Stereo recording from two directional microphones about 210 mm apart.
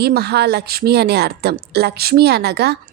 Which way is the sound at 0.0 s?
50° right (ahead or behind).